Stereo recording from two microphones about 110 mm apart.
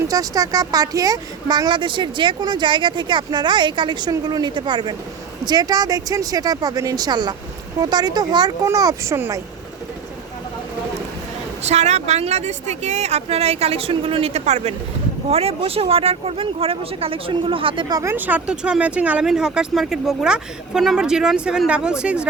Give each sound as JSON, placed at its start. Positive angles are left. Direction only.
{"t": 0.1, "sound": "speech", "side_deg": -35}
{"t": 11.6, "sound": "a woman's voice", "side_deg": -90}
{"t": 15.3, "sound": "speech", "side_deg": -65}
{"t": 17.8, "sound": "speech", "side_deg": -35}
{"t": 18.1, "sound": "speech", "side_deg": -15}